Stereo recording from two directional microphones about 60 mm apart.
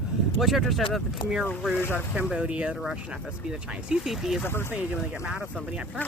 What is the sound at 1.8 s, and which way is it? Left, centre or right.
Speech, left.